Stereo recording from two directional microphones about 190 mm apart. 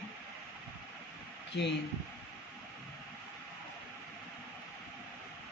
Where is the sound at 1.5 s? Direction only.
60° left (ahead or behind).